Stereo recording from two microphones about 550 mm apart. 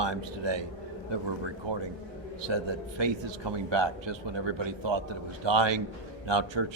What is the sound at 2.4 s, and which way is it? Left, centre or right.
Speech, right.